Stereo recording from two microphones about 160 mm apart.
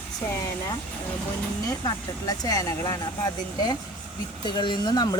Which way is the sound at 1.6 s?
25° left (ahead or behind).